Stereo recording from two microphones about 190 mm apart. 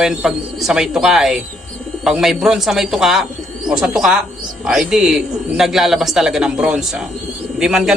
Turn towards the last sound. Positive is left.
turn(degrees=-5)  # may be behind; listen again after turning